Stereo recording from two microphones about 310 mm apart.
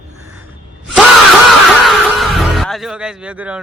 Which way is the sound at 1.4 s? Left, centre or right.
Centre.